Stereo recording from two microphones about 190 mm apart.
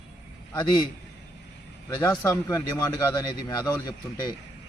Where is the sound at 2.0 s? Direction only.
15° left (ahead or behind).